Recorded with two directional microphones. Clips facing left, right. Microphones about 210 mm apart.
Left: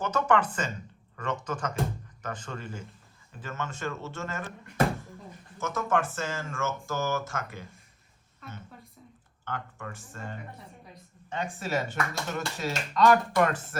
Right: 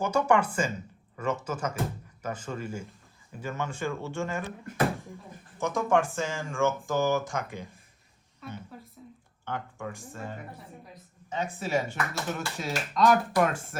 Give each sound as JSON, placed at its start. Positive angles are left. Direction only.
{"t": 0.0, "sound": "a woman's voice", "side_deg": -10}
{"t": 5.5, "sound": "a woman's voice", "side_deg": -15}
{"t": 8.4, "sound": "a woman's voice", "side_deg": -5}